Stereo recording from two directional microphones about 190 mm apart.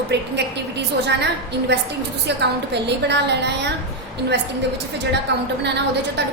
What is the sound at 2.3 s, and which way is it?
A woman's voice, 65° right (ahead or behind).